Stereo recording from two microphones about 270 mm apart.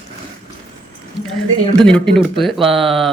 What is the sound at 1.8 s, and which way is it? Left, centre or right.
Speech, centre.